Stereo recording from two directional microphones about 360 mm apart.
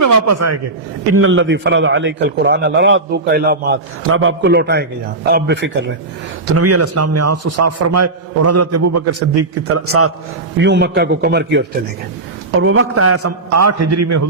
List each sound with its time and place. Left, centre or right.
0.0 s a man's voice: right
1.1 s a man's voice: right
6.5 s a man's voice: right